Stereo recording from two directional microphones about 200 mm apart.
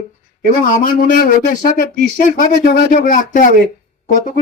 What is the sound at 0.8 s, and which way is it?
A man's voice, 45° left (ahead or behind).